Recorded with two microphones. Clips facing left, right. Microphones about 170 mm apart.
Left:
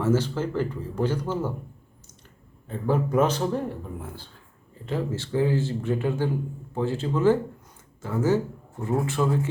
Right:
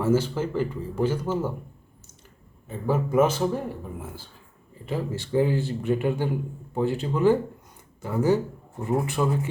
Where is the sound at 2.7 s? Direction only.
10° right (ahead or behind).